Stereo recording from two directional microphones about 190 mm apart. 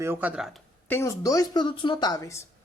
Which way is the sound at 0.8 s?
15° left (ahead or behind).